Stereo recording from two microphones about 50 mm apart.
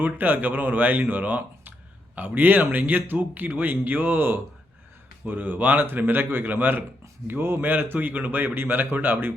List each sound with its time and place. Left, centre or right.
0.0 s a man's voice: right